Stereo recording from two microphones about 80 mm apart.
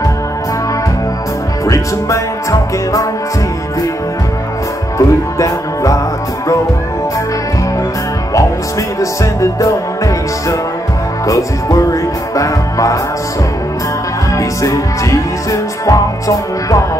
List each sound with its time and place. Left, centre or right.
1.7 s music: left
4.9 s music: left
9.0 s music: left
14.3 s music: left